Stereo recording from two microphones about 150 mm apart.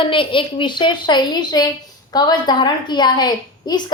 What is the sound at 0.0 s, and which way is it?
A woman's voice, 35° left (ahead or behind).